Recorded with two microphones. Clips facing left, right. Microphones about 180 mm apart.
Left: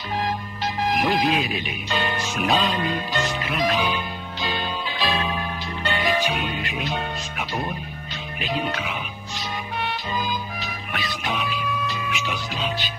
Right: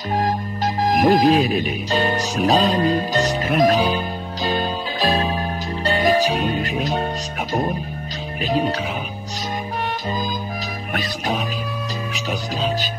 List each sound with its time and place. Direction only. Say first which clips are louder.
0.8 s speech: right 7 dB; 40° right (ahead or behind)
8.4 s music: right 6 dB; 40° right (ahead or behind)
10.9 s music: right 5 dB; 40° right (ahead or behind)